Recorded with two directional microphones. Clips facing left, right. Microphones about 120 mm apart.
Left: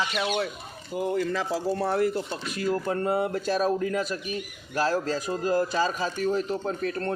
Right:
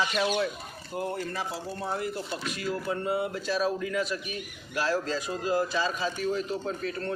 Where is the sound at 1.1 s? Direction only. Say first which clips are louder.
Left 6 dB; 90° left; by 2.1 s 65° left (ahead or behind).